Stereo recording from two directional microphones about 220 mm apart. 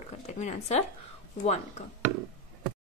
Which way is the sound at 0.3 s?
30° left (ahead or behind).